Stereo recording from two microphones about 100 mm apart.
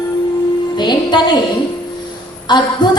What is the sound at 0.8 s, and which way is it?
Music, 50° left (ahead or behind).